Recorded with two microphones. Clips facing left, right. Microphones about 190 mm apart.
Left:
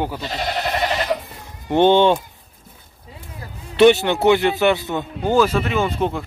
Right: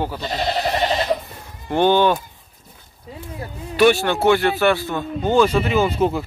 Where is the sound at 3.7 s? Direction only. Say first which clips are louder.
Left 3 dB; 20° left (ahead or behind).